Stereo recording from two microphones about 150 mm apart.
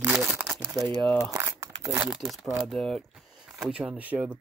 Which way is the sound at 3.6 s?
5° right (ahead or behind).